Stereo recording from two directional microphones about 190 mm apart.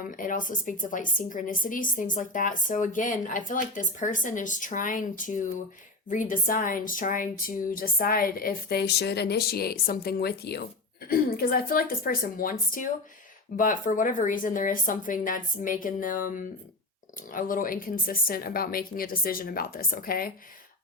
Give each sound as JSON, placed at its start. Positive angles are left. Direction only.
{"t": 0.1, "sound": "a woman's voice", "side_deg": 45}